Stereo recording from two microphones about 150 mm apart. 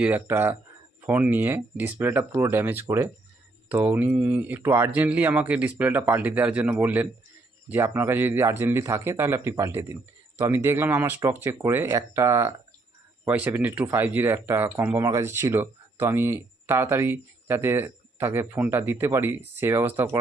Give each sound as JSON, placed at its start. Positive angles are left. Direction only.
{"t": 0.0, "sound": "speech", "side_deg": -15}